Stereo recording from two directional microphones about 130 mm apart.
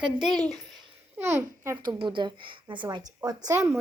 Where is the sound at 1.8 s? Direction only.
35° right (ahead or behind).